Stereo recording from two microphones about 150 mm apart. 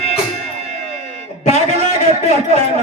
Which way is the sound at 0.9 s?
45° right (ahead or behind).